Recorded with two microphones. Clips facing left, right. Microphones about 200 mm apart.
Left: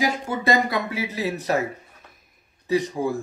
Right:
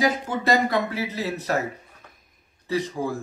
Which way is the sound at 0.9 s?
15° left (ahead or behind).